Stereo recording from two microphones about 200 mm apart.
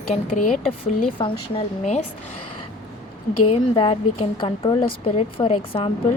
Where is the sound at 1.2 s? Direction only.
20° left (ahead or behind).